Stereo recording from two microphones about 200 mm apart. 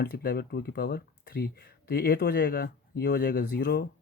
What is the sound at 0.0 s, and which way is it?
Speech, 50° left (ahead or behind).